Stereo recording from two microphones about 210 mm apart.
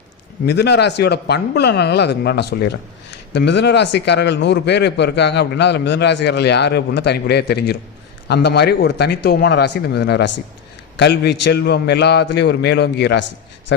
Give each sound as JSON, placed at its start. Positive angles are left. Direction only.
{"t": 0.4, "sound": "a man's voice", "side_deg": 55}